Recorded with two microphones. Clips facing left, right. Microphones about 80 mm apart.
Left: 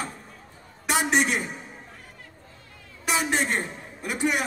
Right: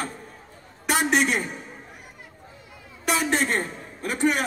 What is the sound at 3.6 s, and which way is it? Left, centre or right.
Speech, right.